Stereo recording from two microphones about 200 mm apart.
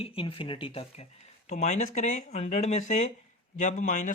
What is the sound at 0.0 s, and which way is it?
Speech, 25° left (ahead or behind).